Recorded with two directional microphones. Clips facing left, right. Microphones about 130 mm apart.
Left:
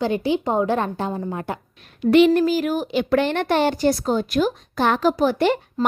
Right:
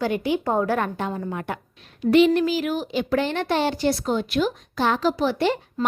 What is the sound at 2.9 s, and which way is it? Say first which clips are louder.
A woman's voice: left 4 dB; 60° left (ahead or behind).